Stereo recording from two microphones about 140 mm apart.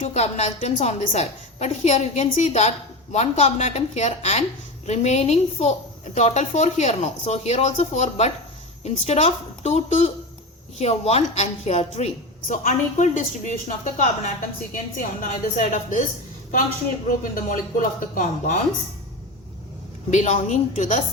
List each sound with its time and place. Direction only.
0.0 s a woman's voice: 55° left (ahead or behind)
12.5 s speech: 65° left (ahead or behind)
14.7 s speech: 75° left (ahead or behind)
17.1 s speech: 70° left (ahead or behind)
20.1 s speech: 60° left (ahead or behind)